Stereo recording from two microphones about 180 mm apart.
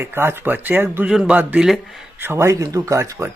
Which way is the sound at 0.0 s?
15° right (ahead or behind).